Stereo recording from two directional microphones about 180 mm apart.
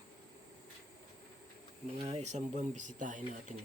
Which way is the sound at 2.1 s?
35° right (ahead or behind).